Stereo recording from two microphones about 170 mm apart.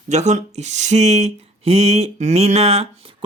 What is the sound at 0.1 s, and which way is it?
Speech, 45° right (ahead or behind).